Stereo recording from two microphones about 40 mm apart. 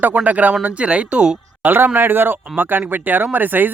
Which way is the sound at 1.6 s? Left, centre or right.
Right.